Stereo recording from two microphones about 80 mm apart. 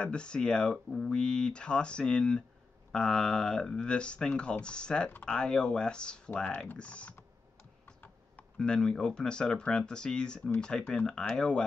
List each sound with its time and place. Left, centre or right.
0.0 s speech: centre
7.8 s computer keyboard: left
8.5 s speech: centre